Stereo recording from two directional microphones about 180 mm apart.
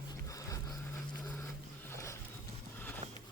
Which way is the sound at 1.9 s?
15° left (ahead or behind).